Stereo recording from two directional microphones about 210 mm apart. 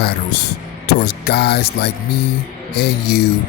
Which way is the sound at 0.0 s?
50° left (ahead or behind).